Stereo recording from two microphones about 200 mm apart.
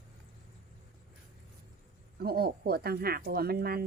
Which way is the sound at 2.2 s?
50° right (ahead or behind).